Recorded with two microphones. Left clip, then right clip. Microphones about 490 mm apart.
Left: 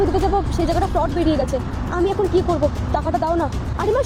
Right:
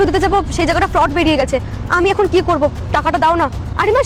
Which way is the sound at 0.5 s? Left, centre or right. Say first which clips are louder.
Right 6 dB; right.